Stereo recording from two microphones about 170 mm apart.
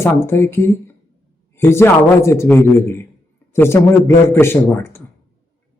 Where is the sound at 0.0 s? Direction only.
15° left (ahead or behind).